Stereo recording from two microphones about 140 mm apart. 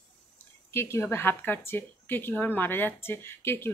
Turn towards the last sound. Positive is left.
turn(degrees=15)  # may be behind; listen again after turning